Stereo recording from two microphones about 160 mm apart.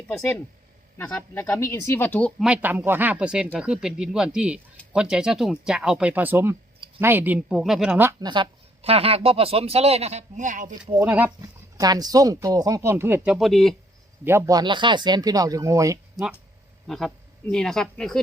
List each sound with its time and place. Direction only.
0.1 s speech: 10° left (ahead or behind)
2.4 s speech: 10° right (ahead or behind)
8.2 s a woman's voice: 30° right (ahead or behind); by 10.8 s 55° right (ahead or behind)
10.9 s speech: 10° right (ahead or behind)
11.3 s speech: 25° right (ahead or behind); by 13.7 s centre (ahead or behind)
14.3 s speech: 20° right (ahead or behind)
16.2 s a man's voice: centre (ahead or behind)